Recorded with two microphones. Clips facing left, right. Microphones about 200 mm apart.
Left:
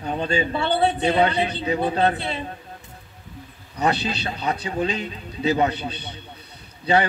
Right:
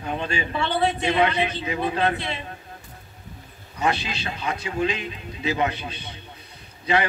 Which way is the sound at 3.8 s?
35° left (ahead or behind).